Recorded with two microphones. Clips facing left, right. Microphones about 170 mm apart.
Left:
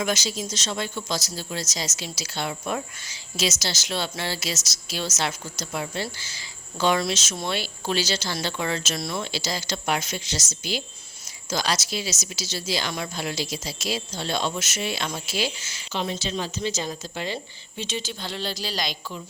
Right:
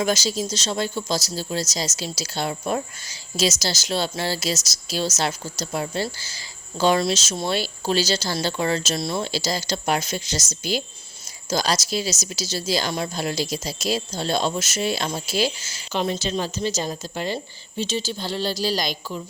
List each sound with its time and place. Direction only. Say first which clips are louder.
0.0 s speech: right 4 dB; 35° right (ahead or behind)